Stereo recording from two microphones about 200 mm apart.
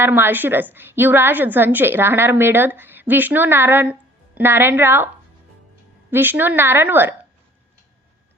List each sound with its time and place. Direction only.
0.0 s a woman's voice: 10° right (ahead or behind)
6.1 s a woman's voice: 10° right (ahead or behind)